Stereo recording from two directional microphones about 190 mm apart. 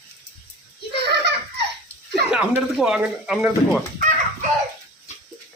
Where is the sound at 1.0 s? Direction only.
60° right (ahead or behind).